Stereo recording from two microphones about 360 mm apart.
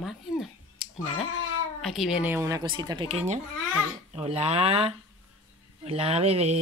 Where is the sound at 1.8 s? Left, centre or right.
Centre.